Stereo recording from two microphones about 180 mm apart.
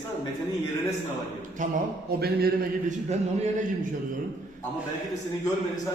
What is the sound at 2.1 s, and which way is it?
Speech, 60° right (ahead or behind).